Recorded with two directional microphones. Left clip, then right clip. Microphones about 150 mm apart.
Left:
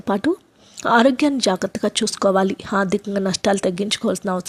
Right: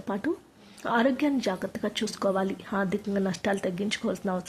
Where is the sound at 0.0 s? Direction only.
40° left (ahead or behind).